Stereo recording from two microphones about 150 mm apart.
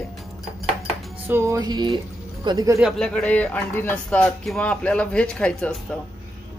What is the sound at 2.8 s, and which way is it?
Speech, centre (ahead or behind).